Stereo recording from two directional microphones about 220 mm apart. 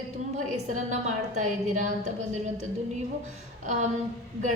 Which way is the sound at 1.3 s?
35° right (ahead or behind).